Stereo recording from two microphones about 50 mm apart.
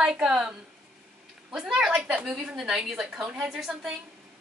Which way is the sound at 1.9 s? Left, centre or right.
Centre.